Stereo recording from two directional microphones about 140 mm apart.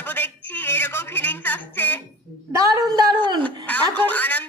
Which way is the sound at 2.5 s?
25° right (ahead or behind).